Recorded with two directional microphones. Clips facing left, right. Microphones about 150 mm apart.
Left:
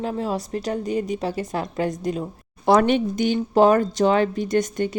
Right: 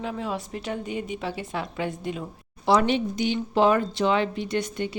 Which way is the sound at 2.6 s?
50° left (ahead or behind).